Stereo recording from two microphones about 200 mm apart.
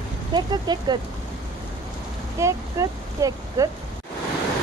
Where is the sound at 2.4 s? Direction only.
15° right (ahead or behind).